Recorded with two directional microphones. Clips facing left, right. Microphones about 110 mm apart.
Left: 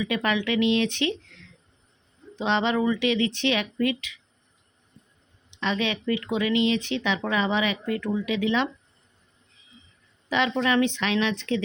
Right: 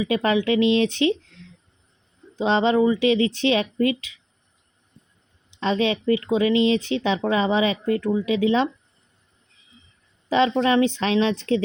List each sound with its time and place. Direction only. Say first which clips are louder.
0.0 s speech: right 5 dB; 30° right (ahead or behind)
5.5 s speech: right 5 dB; 35° right (ahead or behind)
10.2 s speech: right 5 dB; 30° right (ahead or behind)